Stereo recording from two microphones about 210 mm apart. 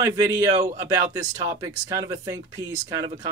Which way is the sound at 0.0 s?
20° right (ahead or behind).